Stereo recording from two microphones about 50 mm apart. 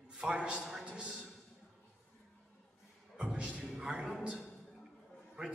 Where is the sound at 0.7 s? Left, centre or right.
Centre.